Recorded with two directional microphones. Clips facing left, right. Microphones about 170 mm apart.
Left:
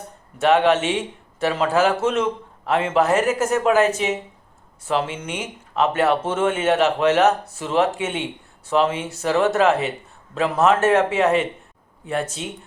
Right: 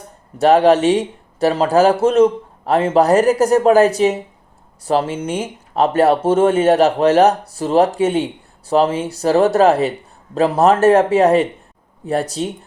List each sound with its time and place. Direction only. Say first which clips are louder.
0.3 s speech: right 5 dB; 35° right (ahead or behind)